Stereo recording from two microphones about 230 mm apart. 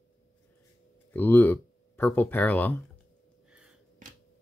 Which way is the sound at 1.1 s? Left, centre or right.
Centre.